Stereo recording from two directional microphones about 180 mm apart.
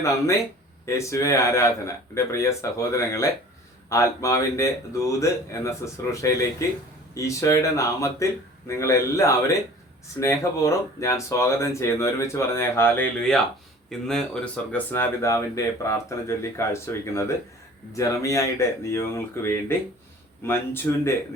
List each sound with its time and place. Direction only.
0.0 s speech: 15° left (ahead or behind)